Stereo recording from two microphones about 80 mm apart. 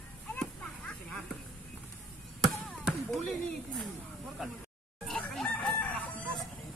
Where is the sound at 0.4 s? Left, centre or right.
Centre.